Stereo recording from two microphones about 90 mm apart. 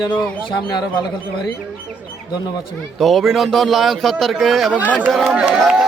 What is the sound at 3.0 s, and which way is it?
A man's voice, centre (ahead or behind).